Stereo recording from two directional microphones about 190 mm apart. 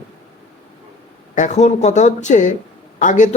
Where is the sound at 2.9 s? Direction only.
40° left (ahead or behind).